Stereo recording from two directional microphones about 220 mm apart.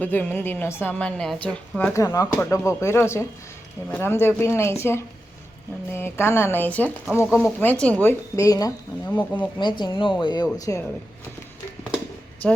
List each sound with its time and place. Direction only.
0.0 s a woman's voice: 5° left (ahead or behind)
9.6 s a woman's voice: 20° left (ahead or behind)